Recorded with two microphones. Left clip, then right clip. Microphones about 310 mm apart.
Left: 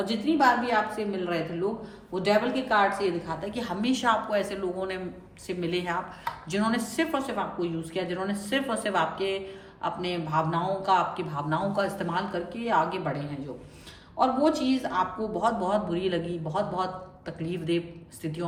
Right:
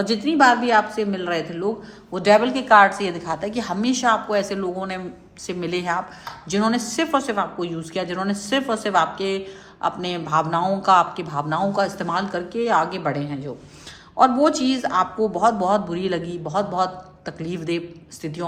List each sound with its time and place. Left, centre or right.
0.0 s a man's voice: right